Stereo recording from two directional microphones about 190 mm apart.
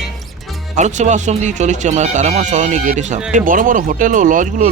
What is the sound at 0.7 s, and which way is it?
Speech, 40° right (ahead or behind).